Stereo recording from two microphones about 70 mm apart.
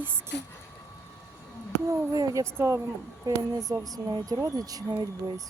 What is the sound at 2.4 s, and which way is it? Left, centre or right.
Speech, right.